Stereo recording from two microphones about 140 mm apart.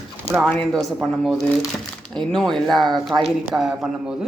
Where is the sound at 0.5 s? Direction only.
5° left (ahead or behind).